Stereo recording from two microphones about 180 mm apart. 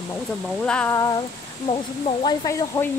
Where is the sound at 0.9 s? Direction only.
20° left (ahead or behind).